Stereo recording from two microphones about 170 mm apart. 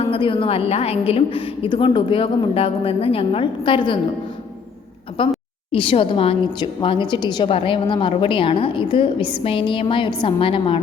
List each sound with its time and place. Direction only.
0.0 s a woman's voice: 30° left (ahead or behind)
5.2 s a woman's voice: 30° left (ahead or behind)